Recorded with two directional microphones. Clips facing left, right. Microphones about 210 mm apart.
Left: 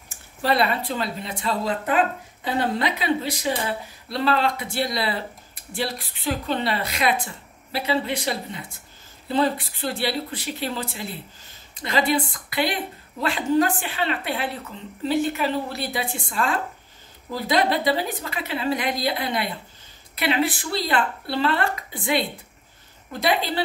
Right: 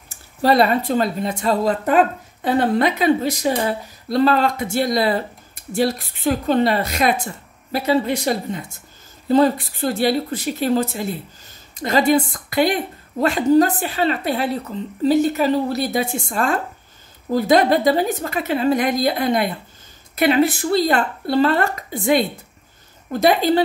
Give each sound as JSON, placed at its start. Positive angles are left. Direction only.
{"t": 0.4, "sound": "a woman's voice", "side_deg": -40}
{"t": 23.2, "sound": "speech", "side_deg": -45}